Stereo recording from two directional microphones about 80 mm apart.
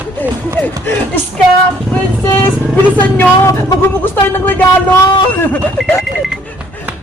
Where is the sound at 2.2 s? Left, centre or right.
Left.